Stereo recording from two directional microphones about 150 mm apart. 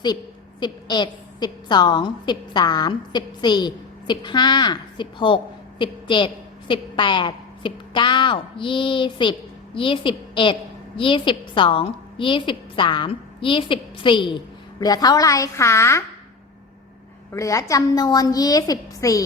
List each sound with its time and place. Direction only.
0.6 s a woman's voice: 30° left (ahead or behind)
17.3 s a woman's voice: 20° left (ahead or behind)